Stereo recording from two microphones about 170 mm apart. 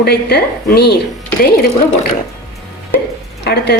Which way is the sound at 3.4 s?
75° left (ahead or behind).